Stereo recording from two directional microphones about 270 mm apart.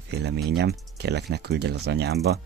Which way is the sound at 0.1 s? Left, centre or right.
Right.